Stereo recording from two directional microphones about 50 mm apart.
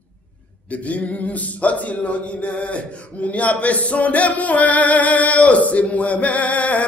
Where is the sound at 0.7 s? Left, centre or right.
Left.